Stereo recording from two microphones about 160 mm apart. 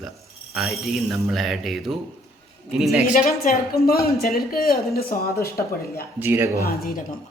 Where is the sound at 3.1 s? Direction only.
60° left (ahead or behind).